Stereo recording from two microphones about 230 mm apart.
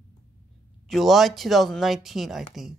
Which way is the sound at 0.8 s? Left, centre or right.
Centre.